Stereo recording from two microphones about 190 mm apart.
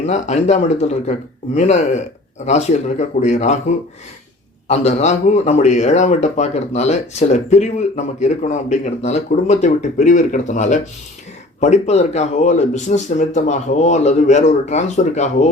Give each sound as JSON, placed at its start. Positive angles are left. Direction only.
{"t": 0.0, "sound": "speech", "side_deg": 35}
{"t": 4.7, "sound": "speech", "side_deg": 35}